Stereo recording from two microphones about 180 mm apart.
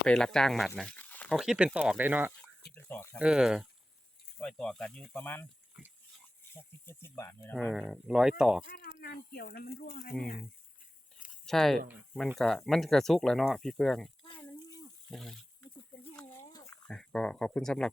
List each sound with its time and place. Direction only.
0.0 s speech: 5° left (ahead or behind)
0.8 s a sound: 5° left (ahead or behind)
1.4 s speech: 5° right (ahead or behind)
2.7 s speech: 15° left (ahead or behind)
3.2 s speech: 5° right (ahead or behind)
6.5 s speech: 10° left (ahead or behind)
7.5 s speech: centre (ahead or behind)
8.6 s speech: 60° left (ahead or behind)
11.4 s speech: centre (ahead or behind)
14.3 s a sound: 25° left (ahead or behind)
15.1 s speech: centre (ahead or behind)
16.1 s a sound: 15° left (ahead or behind)
16.9 s speech: 5° left (ahead or behind)